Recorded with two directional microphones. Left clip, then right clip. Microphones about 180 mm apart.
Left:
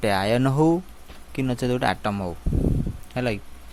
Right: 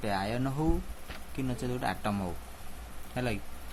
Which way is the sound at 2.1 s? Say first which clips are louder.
Left 7 dB; 35° left (ahead or behind).